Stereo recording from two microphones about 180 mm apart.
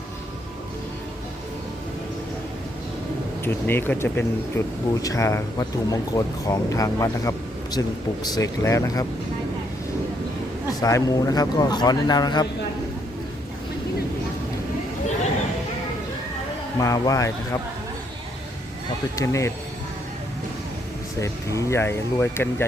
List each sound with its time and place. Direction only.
3.4 s speech: 10° left (ahead or behind)
10.8 s speech: 20° left (ahead or behind)
16.7 s speech: 20° left (ahead or behind)
19.1 s speech: 15° left (ahead or behind)
21.2 s speech: 15° left (ahead or behind)